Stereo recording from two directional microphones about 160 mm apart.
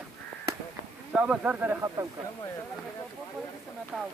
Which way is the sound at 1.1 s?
10° right (ahead or behind).